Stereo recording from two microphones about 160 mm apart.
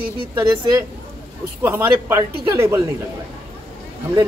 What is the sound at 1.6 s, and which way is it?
A man's voice, 15° right (ahead or behind).